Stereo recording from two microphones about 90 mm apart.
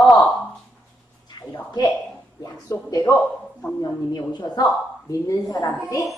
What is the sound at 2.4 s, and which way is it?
Speech, 40° left (ahead or behind).